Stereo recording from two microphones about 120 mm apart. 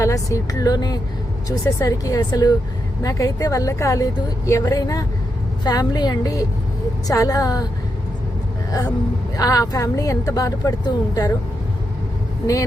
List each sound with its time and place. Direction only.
0.0 s speech: 25° left (ahead or behind)
9.4 s speech: 30° left (ahead or behind)